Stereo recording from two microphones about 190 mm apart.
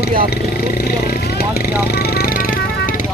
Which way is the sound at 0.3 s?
55° left (ahead or behind).